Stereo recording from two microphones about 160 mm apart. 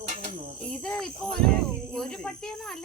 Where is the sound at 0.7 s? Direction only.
5° left (ahead or behind).